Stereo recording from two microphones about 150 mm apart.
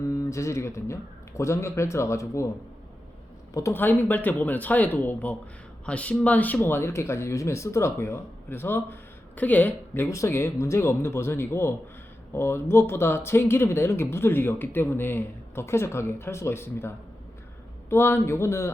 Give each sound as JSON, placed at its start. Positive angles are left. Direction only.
{"t": 0.1, "sound": "speech", "side_deg": 20}
{"t": 3.5, "sound": "speech", "side_deg": 15}